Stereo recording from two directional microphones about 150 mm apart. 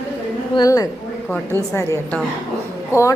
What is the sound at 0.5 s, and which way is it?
A woman's voice, 20° left (ahead or behind).